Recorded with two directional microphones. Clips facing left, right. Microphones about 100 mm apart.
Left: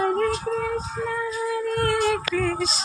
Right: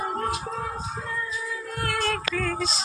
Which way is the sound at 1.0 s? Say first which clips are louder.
Left 8 dB; 90° left.